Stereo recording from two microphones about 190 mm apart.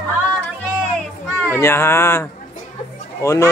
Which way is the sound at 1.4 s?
10° left (ahead or behind).